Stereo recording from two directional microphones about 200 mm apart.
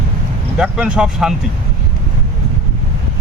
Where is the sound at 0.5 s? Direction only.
5° right (ahead or behind).